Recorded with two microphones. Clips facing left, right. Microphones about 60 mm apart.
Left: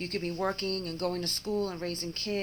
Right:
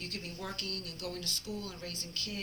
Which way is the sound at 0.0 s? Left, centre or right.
Left.